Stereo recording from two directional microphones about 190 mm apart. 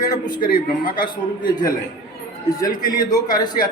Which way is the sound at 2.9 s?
20° left (ahead or behind).